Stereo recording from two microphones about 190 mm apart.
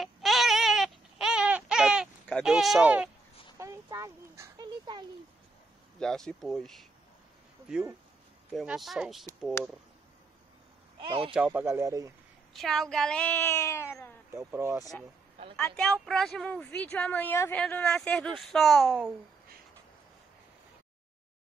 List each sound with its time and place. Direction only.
0.0 s baby cry: centre (ahead or behind)
3.5 s a sound: 15° right (ahead or behind)
5.9 s speech: 5° left (ahead or behind)
8.5 s speech: centre (ahead or behind)
11.0 s a man's voice: 25° right (ahead or behind)
11.3 s speech: 10° right (ahead or behind)
12.5 s speech: centre (ahead or behind)
14.3 s speech: 15° right (ahead or behind)
15.5 s speech: 5° left (ahead or behind)